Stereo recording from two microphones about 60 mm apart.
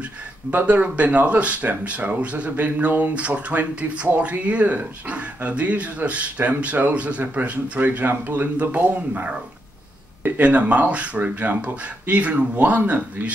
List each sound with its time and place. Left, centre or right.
0.5 s speech: right